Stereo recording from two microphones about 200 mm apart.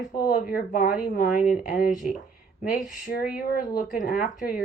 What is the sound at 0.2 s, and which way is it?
Speech, 45° left (ahead or behind).